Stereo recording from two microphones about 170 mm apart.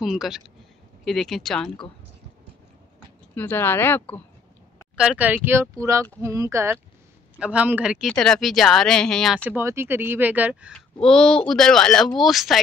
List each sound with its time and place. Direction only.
0.0 s speech: centre (ahead or behind)
3.3 s speech: 10° left (ahead or behind)
4.9 s speech: 5° right (ahead or behind)
9.5 s speech: 15° right (ahead or behind)
10.7 s speech: 5° left (ahead or behind)